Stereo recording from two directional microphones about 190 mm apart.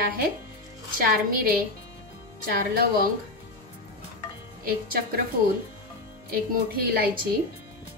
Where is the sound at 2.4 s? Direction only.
50° right (ahead or behind).